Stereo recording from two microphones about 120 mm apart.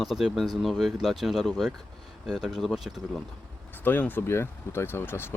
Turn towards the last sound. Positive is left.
turn(degrees=20)  # may be behind; listen again after turning